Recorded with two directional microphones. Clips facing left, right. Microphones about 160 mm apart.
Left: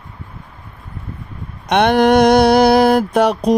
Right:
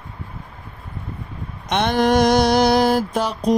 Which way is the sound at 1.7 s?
65° left (ahead or behind).